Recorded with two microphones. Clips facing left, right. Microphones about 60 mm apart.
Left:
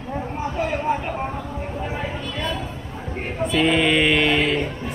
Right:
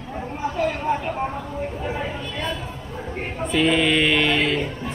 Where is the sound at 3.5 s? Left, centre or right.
Centre.